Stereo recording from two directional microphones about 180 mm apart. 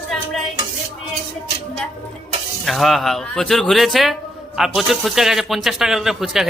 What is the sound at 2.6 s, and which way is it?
Speech, centre (ahead or behind).